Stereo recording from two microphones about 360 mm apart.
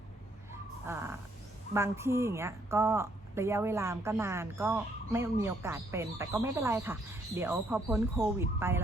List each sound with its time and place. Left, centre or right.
0.9 s a woman's voice: centre